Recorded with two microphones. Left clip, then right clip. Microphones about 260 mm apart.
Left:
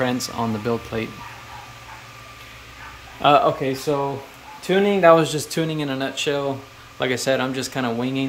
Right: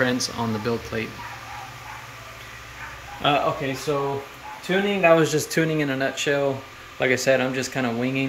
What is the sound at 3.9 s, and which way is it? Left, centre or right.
Speech, centre.